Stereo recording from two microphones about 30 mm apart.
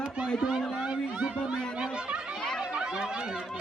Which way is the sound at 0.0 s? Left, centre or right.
Right.